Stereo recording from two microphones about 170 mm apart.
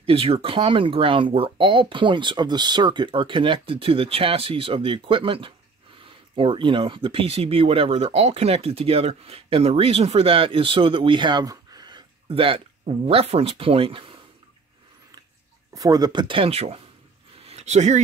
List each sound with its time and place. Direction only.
0.0 s speech: 30° right (ahead or behind)
15.7 s speech: 20° right (ahead or behind)
17.4 s a sound: 40° right (ahead or behind)